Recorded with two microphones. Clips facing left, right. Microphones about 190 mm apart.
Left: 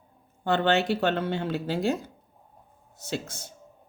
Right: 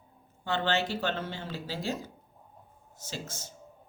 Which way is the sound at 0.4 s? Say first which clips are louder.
Left 6 dB; 60° left (ahead or behind).